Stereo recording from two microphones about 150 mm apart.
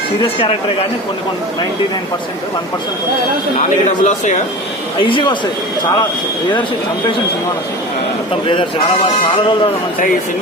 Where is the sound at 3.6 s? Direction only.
55° left (ahead or behind).